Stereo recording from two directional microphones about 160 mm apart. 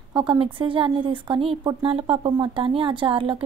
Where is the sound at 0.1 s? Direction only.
30° right (ahead or behind).